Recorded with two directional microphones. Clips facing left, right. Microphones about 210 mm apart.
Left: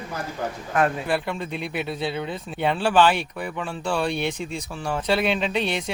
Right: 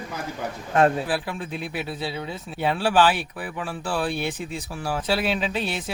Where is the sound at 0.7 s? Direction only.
30° right (ahead or behind).